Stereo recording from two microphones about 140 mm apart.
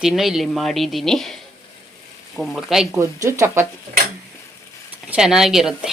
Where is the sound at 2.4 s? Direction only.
5° right (ahead or behind).